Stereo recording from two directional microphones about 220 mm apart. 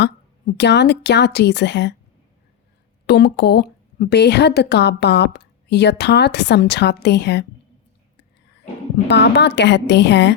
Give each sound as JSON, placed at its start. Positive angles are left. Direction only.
{"t": 0.5, "sound": "a woman's voice", "side_deg": 50}
{"t": 3.1, "sound": "a woman's voice", "side_deg": 50}
{"t": 9.0, "sound": "a woman's voice", "side_deg": 50}